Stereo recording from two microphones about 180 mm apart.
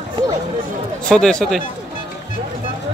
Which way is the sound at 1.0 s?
5° left (ahead or behind).